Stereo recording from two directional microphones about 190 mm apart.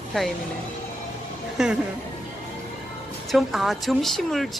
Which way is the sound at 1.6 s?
5° right (ahead or behind).